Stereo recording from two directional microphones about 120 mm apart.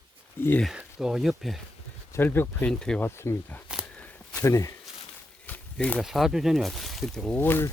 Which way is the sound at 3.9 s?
10° left (ahead or behind).